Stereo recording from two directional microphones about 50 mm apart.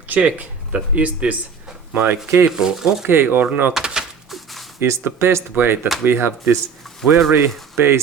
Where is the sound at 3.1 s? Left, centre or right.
Right.